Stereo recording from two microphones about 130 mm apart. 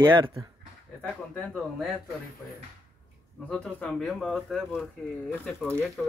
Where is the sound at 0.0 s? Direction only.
40° right (ahead or behind).